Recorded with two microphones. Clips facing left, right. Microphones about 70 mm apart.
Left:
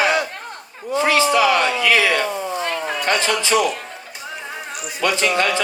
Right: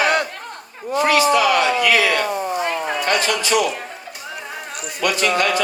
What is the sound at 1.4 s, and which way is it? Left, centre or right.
Speech, left.